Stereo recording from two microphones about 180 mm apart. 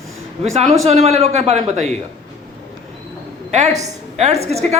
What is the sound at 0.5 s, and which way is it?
A man's voice, 35° right (ahead or behind).